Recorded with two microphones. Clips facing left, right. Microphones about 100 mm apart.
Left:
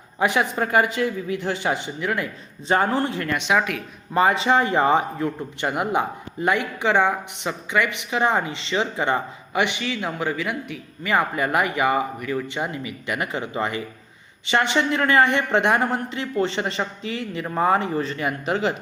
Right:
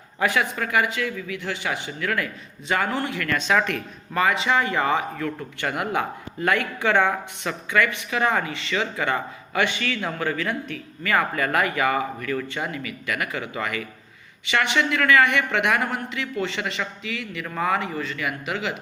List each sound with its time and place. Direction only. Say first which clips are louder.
0.2 s speech: left 2 dB; 25° left (ahead or behind)
3.2 s speech: left 1 dB; 20° left (ahead or behind)
4.1 s a man's voice: left 3 dB; 30° left (ahead or behind)